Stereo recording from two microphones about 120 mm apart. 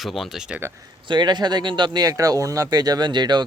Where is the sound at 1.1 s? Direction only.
35° right (ahead or behind).